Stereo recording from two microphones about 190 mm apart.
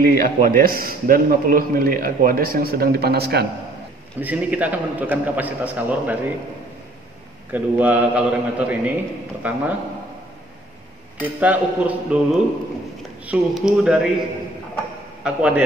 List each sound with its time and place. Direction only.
0.0 s a man's voice: 45° right (ahead or behind)
4.2 s a man's voice: 10° right (ahead or behind)
7.5 s a man's voice: 10° right (ahead or behind)
11.3 s a man's voice: 10° right (ahead or behind)
15.2 s speech: 5° right (ahead or behind)